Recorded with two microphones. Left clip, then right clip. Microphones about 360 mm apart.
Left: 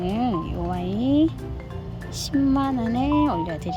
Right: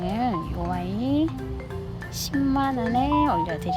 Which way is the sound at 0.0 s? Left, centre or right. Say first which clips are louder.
Left 1 dB; centre.